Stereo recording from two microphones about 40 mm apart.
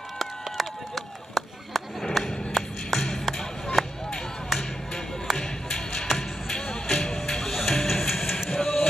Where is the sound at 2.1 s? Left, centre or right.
Centre.